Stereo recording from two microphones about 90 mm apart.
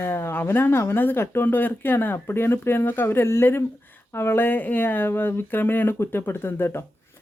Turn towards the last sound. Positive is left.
turn(degrees=25)  # may be behind; listen again after turning